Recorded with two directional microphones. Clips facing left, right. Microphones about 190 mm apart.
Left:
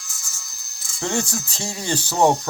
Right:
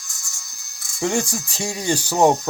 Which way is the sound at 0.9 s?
10° right (ahead or behind).